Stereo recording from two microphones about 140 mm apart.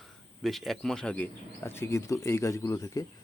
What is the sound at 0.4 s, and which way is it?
Speech, centre (ahead or behind).